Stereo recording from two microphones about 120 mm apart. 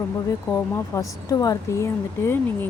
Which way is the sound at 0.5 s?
25° left (ahead or behind).